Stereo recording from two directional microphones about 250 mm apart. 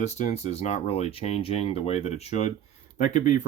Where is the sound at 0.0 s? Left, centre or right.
Left.